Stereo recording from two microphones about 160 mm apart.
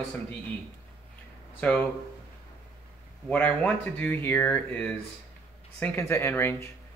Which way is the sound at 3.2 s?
10° left (ahead or behind).